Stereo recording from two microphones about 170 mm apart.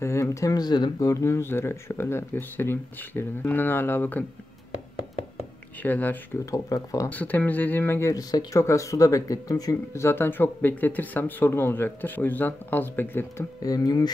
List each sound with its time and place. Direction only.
0.0 s speech: 15° left (ahead or behind)
5.8 s speech: 10° left (ahead or behind)
7.1 s speech: 10° left (ahead or behind)